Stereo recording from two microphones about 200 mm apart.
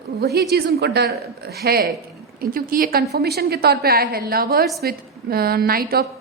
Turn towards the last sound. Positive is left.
turn(degrees=-50)  # may be behind; listen again after turning